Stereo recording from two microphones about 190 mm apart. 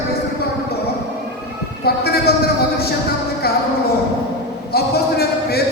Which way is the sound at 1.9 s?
55° left (ahead or behind).